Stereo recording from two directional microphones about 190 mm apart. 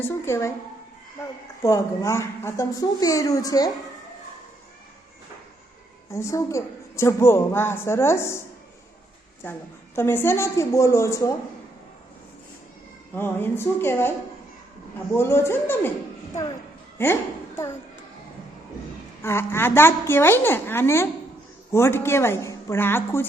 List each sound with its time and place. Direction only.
0.0 s a woman's voice: 15° left (ahead or behind)
1.6 s a woman's voice: 15° left (ahead or behind)
6.1 s a woman's voice: 15° left (ahead or behind)
9.4 s a woman's voice: 10° left (ahead or behind)
13.1 s a woman's voice: 10° left (ahead or behind)
15.1 s a woman's voice: 15° left (ahead or behind)
17.0 s a woman's voice: 10° left (ahead or behind)
19.2 s a woman's voice: 15° left (ahead or behind)